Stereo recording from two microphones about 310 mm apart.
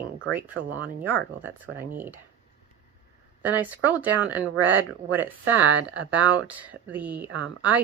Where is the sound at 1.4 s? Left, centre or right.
Centre.